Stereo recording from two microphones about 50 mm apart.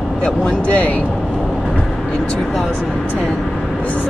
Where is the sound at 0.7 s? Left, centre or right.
Left.